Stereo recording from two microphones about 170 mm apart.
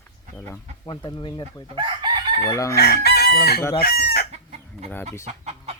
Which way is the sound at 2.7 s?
70° left (ahead or behind).